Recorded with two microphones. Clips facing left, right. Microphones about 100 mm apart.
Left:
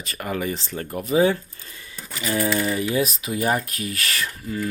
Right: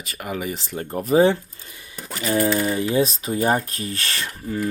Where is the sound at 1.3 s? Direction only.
20° right (ahead or behind).